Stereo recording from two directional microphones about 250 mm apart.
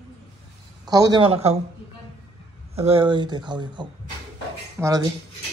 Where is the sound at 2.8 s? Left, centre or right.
Right.